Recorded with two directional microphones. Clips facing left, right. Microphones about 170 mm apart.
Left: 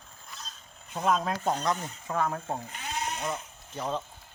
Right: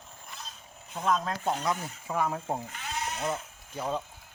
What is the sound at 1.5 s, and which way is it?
Speech, 5° right (ahead or behind).